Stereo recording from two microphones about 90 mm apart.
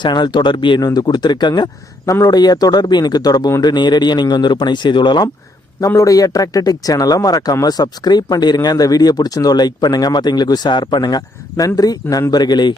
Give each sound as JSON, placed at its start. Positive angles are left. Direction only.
{"t": 0.0, "sound": "speech", "side_deg": 55}
{"t": 0.8, "sound": "speech", "side_deg": 45}
{"t": 6.0, "sound": "speech", "side_deg": 40}